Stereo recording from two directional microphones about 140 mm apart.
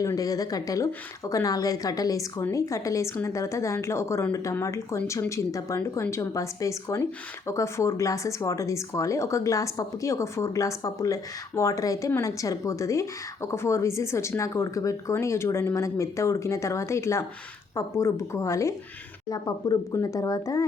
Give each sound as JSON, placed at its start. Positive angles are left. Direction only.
{"t": 0.0, "sound": "speech", "side_deg": 25}